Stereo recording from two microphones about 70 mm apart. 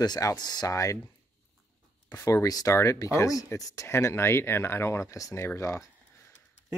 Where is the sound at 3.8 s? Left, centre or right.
Left.